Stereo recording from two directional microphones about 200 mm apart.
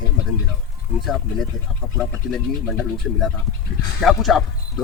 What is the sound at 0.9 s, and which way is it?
Speech, centre (ahead or behind).